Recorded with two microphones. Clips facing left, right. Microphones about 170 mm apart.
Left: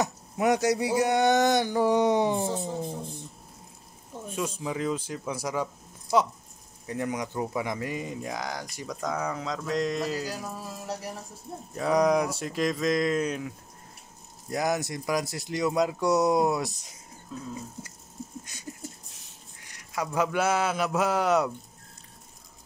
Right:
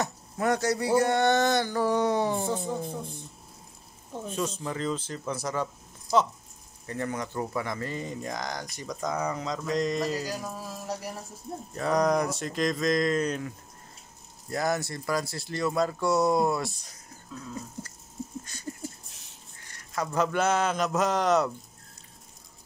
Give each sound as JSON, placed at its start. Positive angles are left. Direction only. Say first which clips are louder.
{"t": 0.0, "sound": "speech", "louder": "left 3 dB", "side_deg": 15}
{"t": 4.4, "sound": "speech", "louder": "left 1 dB", "side_deg": 10}
{"t": 6.9, "sound": "speech", "louder": "left 1 dB", "side_deg": 10}
{"t": 14.5, "sound": "speech", "louder": "left 1 dB", "side_deg": 15}
{"t": 19.7, "sound": "a sound", "louder": "even", "side_deg": 10}
{"t": 20.2, "sound": "speech", "louder": "even", "side_deg": 10}